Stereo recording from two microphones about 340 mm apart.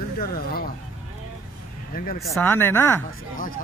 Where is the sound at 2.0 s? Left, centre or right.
Left.